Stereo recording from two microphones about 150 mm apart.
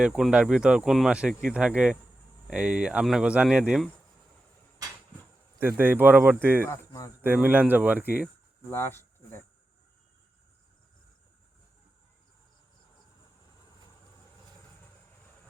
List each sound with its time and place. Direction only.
0.0 s speech: 5° right (ahead or behind)
5.5 s speech: 15° right (ahead or behind)
6.7 s speech: 20° left (ahead or behind)
7.2 s speech: 10° right (ahead or behind)
8.7 s speech: 15° left (ahead or behind)